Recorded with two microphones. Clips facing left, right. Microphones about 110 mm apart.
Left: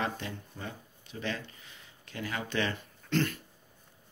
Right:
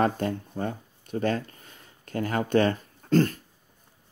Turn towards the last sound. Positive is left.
turn(degrees=-40)  # may be behind; listen again after turning